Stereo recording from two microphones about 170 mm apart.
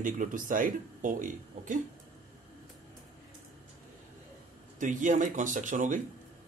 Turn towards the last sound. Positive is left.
turn(degrees=-50)  # may be behind; listen again after turning